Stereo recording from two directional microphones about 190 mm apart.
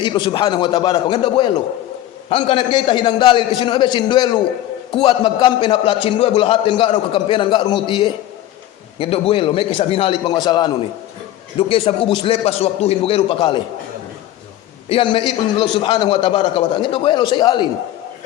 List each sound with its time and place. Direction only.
0.0 s a man's voice: 25° left (ahead or behind)
11.7 s a man's voice: 30° left (ahead or behind)
14.8 s a man's voice: 25° left (ahead or behind)